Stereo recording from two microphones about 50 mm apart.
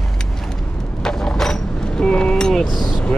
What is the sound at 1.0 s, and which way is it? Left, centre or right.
Vehicle, centre.